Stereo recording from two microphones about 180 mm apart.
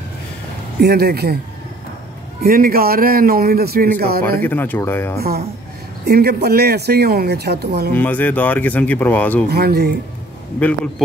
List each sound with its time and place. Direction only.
0.7 s speech: 60° right (ahead or behind)
2.4 s speech: 55° right (ahead or behind)
4.4 s speech: 10° left (ahead or behind)
6.0 s speech: 60° right (ahead or behind)
7.9 s speech: 10° left (ahead or behind)
9.5 s speech: 60° right (ahead or behind)